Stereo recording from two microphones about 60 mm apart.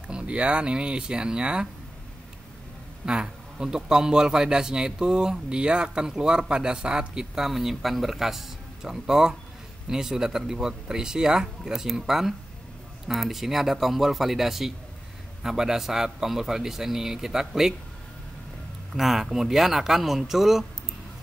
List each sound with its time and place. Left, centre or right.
0.1 s a man's voice: centre
3.1 s a man's voice: centre
18.9 s speech: centre